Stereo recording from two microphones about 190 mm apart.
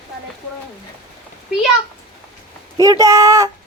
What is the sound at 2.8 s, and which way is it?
Speech, 15° right (ahead or behind).